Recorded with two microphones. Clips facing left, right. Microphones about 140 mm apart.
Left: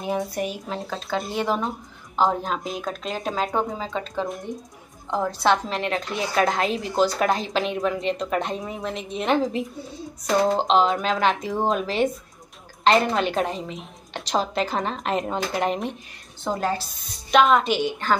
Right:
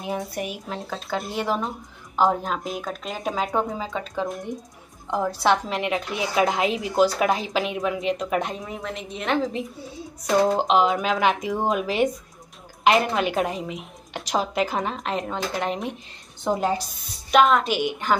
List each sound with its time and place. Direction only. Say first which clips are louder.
0.0 s a woman's voice: left 3 dB; centre (ahead or behind)
10.2 s a woman's voice: right 1 dB; 10° right (ahead or behind)
16.4 s a woman's voice: right 2 dB; 15° right (ahead or behind)
17.3 s a woman's voice: even; centre (ahead or behind)
17.7 s a woman's voice: even; 15° right (ahead or behind)